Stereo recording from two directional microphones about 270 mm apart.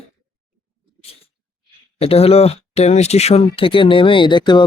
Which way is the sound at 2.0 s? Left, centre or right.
Left.